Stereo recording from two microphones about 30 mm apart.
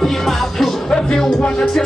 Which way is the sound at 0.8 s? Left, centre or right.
Left.